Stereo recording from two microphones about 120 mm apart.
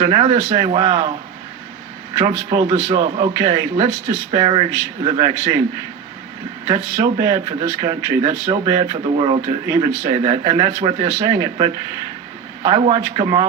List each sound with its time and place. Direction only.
0.0 s a man's voice: 40° right (ahead or behind)
2.1 s a man's voice: 35° right (ahead or behind)
6.7 s a man's voice: 30° right (ahead or behind)
8.8 s a man's voice: 40° right (ahead or behind)
12.7 s a man's voice: 45° right (ahead or behind)